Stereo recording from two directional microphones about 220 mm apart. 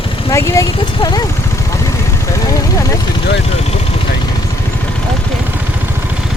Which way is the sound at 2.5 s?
15° left (ahead or behind).